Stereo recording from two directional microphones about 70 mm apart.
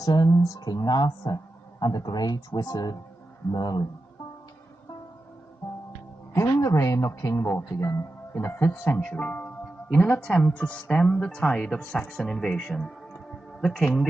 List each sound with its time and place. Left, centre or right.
0.0 s speech: left
0.3 s speech: left
1.8 s speech: left
3.5 s speech: left
6.3 s speech: left
9.0 s speech: left; by 14.1 s centre